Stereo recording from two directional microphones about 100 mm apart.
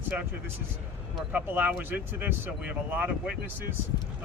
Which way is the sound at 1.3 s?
20° right (ahead or behind).